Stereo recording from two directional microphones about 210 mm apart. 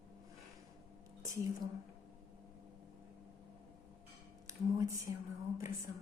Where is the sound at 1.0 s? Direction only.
15° right (ahead or behind).